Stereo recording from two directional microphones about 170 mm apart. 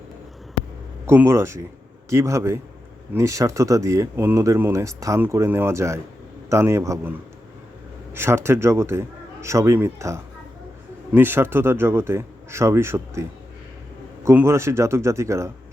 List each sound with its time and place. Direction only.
1.0 s speech: 15° right (ahead or behind)
14.3 s speech: 15° right (ahead or behind)